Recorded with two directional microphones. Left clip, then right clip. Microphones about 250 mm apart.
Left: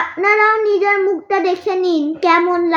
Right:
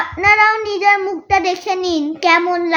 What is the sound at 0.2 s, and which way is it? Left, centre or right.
A child's voice, right.